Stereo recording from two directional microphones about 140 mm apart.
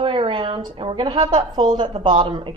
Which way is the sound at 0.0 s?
35° right (ahead or behind).